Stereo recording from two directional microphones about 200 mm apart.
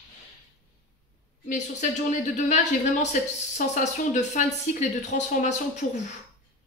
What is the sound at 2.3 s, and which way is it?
A woman's voice, 35° left (ahead or behind).